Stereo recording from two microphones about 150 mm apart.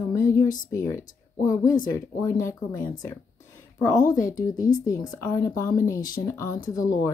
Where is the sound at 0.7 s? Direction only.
20° left (ahead or behind).